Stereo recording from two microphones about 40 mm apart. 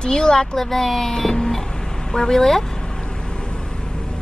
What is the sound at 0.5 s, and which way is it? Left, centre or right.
Speech, centre.